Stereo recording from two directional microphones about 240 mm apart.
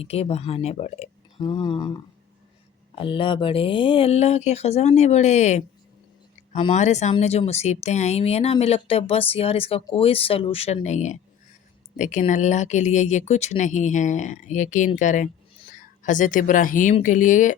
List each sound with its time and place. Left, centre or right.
0.0 s speech: left